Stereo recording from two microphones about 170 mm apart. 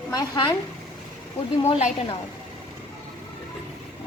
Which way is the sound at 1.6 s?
40° left (ahead or behind).